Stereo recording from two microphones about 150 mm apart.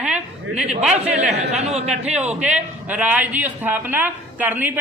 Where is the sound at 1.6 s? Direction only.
45° right (ahead or behind).